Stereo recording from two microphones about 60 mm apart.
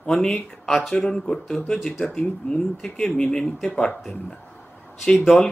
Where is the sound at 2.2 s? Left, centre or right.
Centre.